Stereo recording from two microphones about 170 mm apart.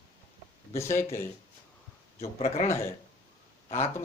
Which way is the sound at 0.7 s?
15° left (ahead or behind).